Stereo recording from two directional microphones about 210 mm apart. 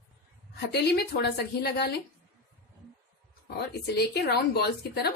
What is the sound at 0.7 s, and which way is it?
A woman's voice, 50° left (ahead or behind).